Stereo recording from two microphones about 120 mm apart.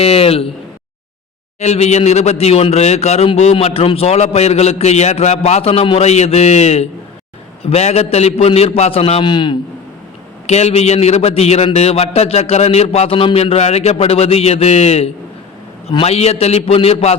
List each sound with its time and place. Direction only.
0.0 s a man's voice: 55° left (ahead or behind)
1.5 s a man's voice: 65° left (ahead or behind)
9.2 s a man's voice: 40° left (ahead or behind)
10.4 s a man's voice: 65° left (ahead or behind)